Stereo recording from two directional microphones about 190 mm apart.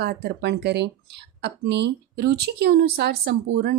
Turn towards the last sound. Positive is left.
turn(degrees=-55)  # may be behind; listen again after turning